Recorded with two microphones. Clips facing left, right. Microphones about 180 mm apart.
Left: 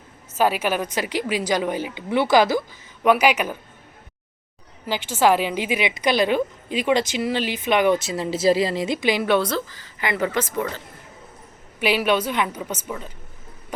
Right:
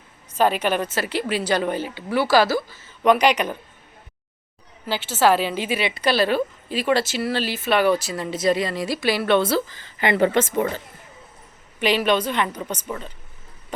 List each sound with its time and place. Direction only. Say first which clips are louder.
0.3 s a woman's voice: right 1 dB; 10° left (ahead or behind)
4.9 s a woman's voice: even; 15° left (ahead or behind)
9.7 s speech: right 5 dB; 25° right (ahead or behind)
11.8 s a woman's voice: right 1 dB; 10° left (ahead or behind)